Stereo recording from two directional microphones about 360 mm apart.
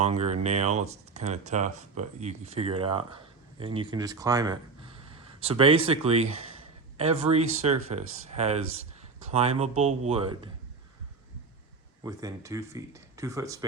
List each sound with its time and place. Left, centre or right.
0.0 s speech: centre
12.0 s speech: centre